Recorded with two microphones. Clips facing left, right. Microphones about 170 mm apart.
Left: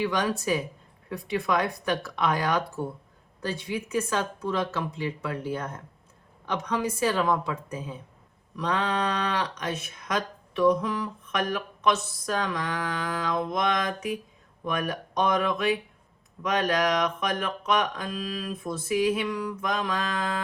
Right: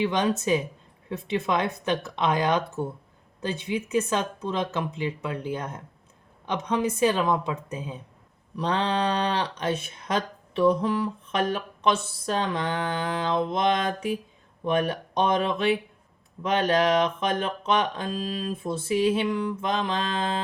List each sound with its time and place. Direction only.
0.0 s speech: 20° right (ahead or behind)